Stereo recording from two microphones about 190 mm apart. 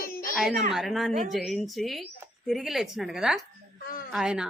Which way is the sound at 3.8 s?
50° left (ahead or behind).